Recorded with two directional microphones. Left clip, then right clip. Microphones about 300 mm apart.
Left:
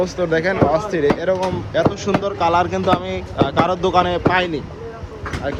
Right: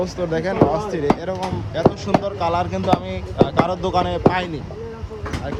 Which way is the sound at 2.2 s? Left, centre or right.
Centre.